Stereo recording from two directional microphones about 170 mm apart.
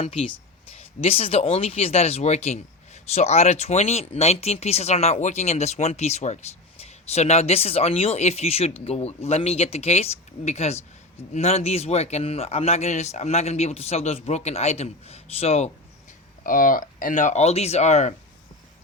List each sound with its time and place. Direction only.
0.0 s speech: 35° left (ahead or behind)
16.4 s speech: 50° left (ahead or behind)